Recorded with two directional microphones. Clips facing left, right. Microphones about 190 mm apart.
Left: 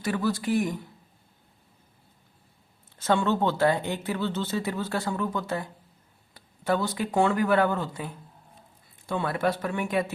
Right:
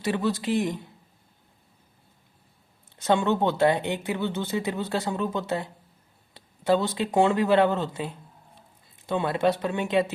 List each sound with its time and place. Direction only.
0.0 s speech: 20° right (ahead or behind)
2.9 s speech: 15° right (ahead or behind)